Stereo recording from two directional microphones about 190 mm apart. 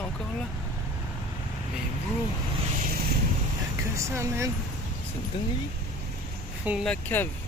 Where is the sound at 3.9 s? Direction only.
15° right (ahead or behind).